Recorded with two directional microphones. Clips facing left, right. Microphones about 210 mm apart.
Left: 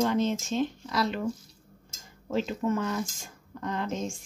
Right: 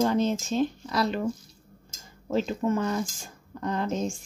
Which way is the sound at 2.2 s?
35° right (ahead or behind).